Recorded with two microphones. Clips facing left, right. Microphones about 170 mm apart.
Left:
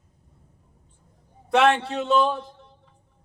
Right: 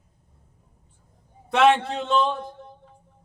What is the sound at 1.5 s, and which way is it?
Speech, centre (ahead or behind).